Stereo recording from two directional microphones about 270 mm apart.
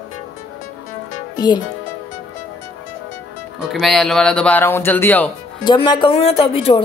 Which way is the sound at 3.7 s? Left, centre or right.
Centre.